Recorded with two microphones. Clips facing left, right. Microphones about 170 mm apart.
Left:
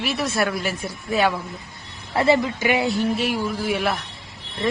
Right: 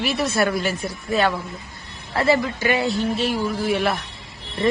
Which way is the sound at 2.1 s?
20° left (ahead or behind).